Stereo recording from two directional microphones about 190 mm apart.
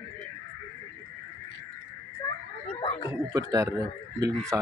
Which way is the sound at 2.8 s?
30° left (ahead or behind).